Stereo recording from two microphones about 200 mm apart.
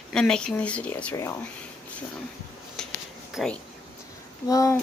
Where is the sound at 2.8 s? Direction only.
5° left (ahead or behind).